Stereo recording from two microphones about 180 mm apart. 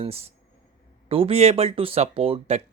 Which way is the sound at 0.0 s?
35° right (ahead or behind).